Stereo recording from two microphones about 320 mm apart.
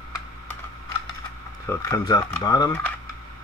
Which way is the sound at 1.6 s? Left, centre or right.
Centre.